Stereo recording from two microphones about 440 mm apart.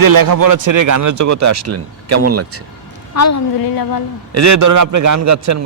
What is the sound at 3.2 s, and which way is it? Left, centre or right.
Speech, left.